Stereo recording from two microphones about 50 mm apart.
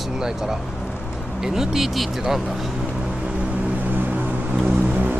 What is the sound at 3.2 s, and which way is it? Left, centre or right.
Vehicle, right.